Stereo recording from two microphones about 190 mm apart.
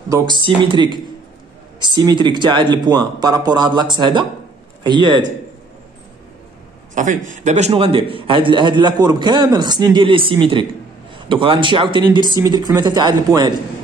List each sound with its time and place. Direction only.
0.1 s a man's voice: 25° right (ahead or behind)
7.0 s a man's voice: 40° right (ahead or behind); by 13.5 s 20° right (ahead or behind)